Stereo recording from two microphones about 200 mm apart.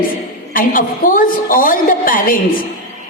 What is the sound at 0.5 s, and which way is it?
A woman's voice, 45° left (ahead or behind).